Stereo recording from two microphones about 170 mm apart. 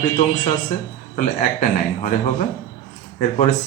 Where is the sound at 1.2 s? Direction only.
50° left (ahead or behind).